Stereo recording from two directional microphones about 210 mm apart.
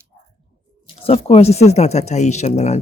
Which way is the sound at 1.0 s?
30° left (ahead or behind).